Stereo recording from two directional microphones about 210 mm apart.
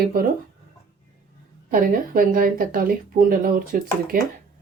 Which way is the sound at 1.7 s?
40° right (ahead or behind).